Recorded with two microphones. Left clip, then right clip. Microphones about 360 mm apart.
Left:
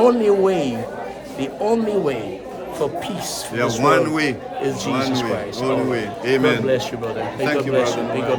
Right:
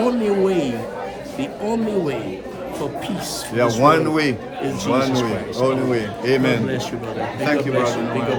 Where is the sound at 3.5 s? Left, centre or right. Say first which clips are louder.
Right 2 dB; centre.